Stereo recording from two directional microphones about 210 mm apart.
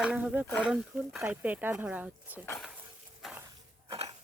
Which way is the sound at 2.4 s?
5° left (ahead or behind).